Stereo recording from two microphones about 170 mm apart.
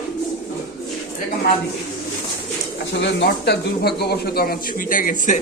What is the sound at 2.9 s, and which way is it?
Speech, 90° left.